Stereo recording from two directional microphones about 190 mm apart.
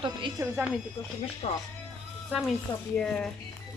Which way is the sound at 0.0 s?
25° right (ahead or behind).